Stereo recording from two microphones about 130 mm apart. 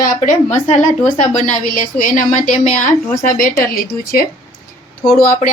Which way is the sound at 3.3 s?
90° left.